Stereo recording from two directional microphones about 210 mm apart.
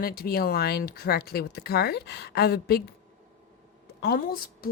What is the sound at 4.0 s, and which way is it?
Speech, 45° left (ahead or behind).